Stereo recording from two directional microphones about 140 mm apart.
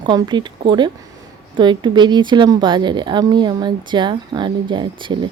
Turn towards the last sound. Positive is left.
turn(degrees=-35)  # may be behind; listen again after turning